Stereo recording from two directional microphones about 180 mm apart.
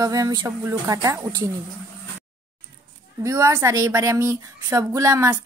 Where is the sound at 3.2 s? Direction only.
15° right (ahead or behind).